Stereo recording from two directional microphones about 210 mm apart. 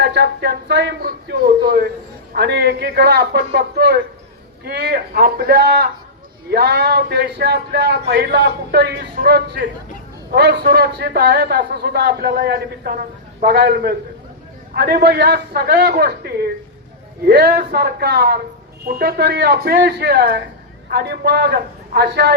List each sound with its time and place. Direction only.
0.0 s a man's voice: 55° right (ahead or behind)